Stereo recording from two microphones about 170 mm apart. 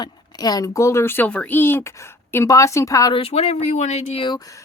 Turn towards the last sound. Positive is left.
turn(degrees=20)  # may be behind; listen again after turning